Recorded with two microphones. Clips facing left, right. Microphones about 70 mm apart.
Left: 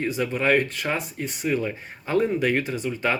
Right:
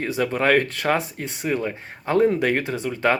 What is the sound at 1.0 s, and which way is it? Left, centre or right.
Speech, right.